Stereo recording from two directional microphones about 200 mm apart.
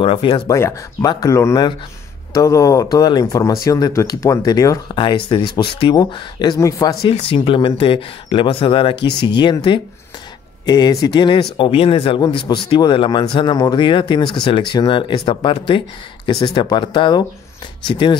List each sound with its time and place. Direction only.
0.0 s speech: 25° left (ahead or behind)
8.9 s speech: 55° left (ahead or behind)
9.2 s speech: 25° left (ahead or behind)